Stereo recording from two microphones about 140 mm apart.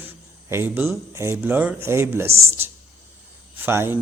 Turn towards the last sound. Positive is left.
turn(degrees=-15)  # may be behind; listen again after turning